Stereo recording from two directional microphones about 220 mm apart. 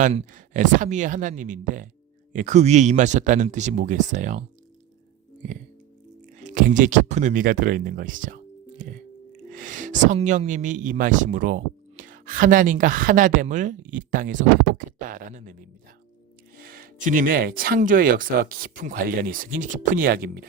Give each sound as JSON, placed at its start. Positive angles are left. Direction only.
{"t": 0.0, "sound": "speech", "side_deg": -30}
{"t": 6.4, "sound": "speech", "side_deg": -35}
{"t": 8.8, "sound": "chewing", "side_deg": -35}
{"t": 9.5, "sound": "speech", "side_deg": -35}
{"t": 16.6, "sound": "speech", "side_deg": -40}